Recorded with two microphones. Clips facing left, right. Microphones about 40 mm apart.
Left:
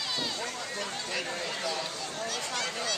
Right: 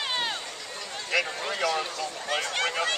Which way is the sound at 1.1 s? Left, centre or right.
Right.